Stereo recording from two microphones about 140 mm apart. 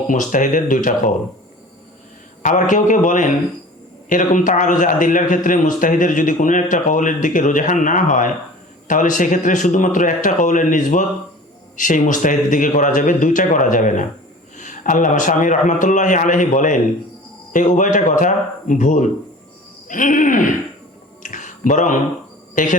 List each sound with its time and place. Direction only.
0.1 s a man's voice: 65° left (ahead or behind)
2.4 s a man's voice: 65° left (ahead or behind)
21.2 s a sound: 65° left (ahead or behind)
22.6 s a man's voice: 70° left (ahead or behind)